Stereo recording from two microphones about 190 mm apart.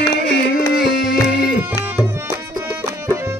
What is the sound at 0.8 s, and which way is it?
Music, centre (ahead or behind).